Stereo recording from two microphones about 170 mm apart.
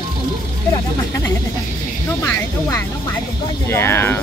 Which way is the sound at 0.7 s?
15° left (ahead or behind).